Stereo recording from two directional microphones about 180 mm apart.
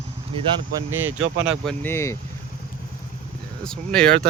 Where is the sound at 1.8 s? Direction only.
15° left (ahead or behind).